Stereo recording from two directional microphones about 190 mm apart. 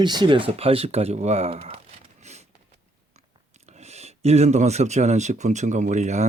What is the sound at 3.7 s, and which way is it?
Speech, 35° right (ahead or behind).